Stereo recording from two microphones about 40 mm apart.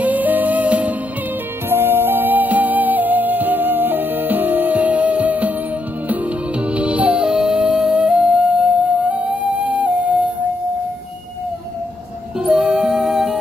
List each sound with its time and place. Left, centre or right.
0.0 s music: right
1.7 s music: right
7.2 s music: centre; by 10.1 s right
12.4 s music: right
12.9 s music: centre